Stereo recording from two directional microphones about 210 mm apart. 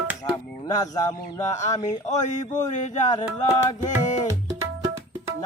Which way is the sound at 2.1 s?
35° left (ahead or behind).